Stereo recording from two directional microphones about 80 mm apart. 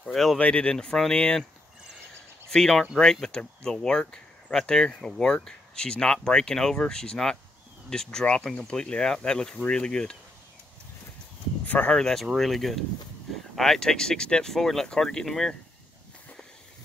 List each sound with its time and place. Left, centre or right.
0.0 s speech: centre
0.4 s speech: centre
2.5 s speech: centre
11.6 s speech: centre
12.0 s speech: centre